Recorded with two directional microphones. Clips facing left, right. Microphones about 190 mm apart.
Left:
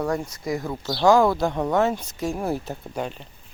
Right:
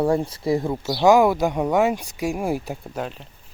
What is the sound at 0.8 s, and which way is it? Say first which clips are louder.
Speech: right 2 dB; 15° right (ahead or behind).